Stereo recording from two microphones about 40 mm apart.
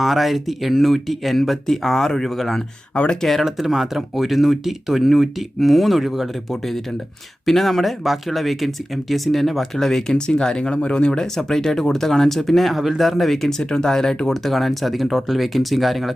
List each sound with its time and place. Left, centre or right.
0.0 s speech: centre
2.9 s speech: left
3.4 s speech: centre
10.1 s speech: centre
11.3 s speech: centre